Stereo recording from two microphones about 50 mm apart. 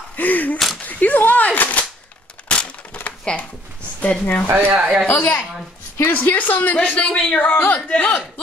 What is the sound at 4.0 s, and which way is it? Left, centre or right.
Speech, left.